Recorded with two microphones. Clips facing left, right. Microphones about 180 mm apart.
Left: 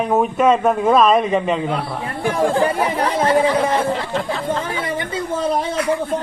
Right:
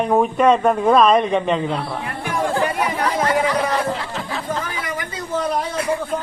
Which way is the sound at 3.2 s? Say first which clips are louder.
Left 4 dB; 30° left (ahead or behind).